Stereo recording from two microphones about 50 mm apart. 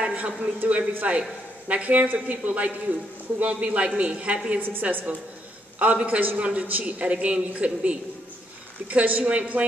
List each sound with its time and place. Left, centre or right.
0.0 s a man's voice: right
4.6 s a woman's voice: right